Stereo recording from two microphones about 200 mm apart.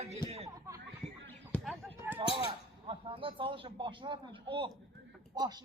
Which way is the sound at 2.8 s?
25° right (ahead or behind).